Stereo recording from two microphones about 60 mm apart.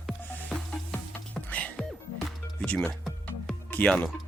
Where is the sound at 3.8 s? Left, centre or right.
Centre.